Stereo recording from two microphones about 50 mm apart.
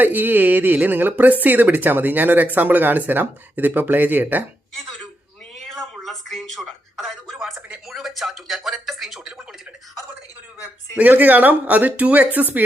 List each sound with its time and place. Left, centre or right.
0.0 s speech: right
5.6 s a sound: centre
7.9 s speech: centre
10.9 s speech: right